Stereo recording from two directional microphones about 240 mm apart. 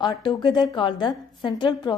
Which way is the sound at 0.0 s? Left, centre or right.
Centre.